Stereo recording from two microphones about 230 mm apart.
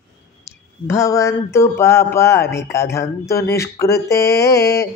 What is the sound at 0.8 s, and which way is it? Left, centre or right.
Speech, centre.